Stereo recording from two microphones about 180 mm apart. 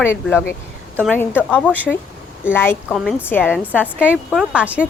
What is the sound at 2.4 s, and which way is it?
Speech, 10° left (ahead or behind).